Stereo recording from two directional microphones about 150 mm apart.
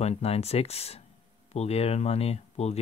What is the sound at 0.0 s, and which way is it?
Speech, 45° left (ahead or behind).